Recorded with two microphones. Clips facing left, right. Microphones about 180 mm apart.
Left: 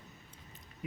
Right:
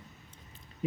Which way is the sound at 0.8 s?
30° right (ahead or behind).